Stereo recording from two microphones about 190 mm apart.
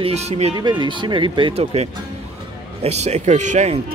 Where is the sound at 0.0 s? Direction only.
35° right (ahead or behind).